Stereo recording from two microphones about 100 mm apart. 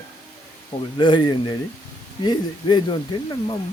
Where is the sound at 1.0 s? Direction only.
50° left (ahead or behind).